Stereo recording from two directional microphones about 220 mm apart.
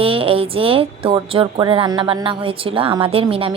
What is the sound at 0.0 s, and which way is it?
Speech, 25° right (ahead or behind).